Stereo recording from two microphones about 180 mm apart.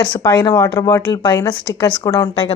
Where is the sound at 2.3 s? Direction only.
35° left (ahead or behind).